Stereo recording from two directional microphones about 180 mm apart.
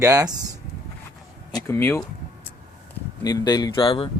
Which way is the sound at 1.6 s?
10° left (ahead or behind).